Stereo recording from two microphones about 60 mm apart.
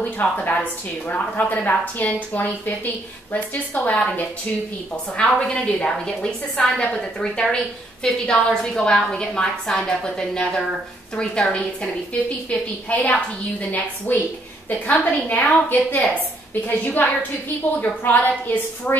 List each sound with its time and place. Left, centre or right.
0.2 s a woman's voice: left